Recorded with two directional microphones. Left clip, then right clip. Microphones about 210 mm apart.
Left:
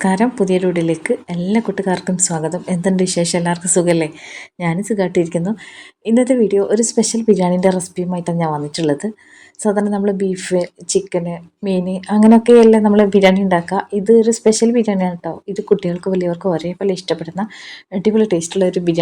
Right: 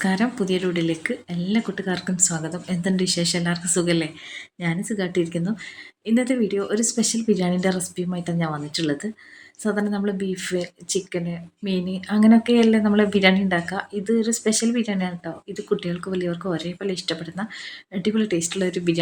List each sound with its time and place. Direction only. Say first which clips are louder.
0.0 s a woman's voice: left 8 dB; 5° left (ahead or behind)